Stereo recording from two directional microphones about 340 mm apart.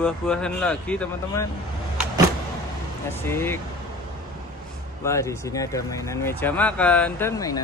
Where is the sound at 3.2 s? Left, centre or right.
Centre.